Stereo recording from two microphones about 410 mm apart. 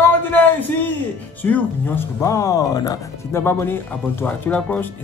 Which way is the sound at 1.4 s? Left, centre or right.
Centre.